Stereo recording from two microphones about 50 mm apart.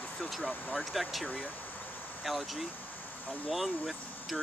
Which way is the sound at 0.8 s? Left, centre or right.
Centre.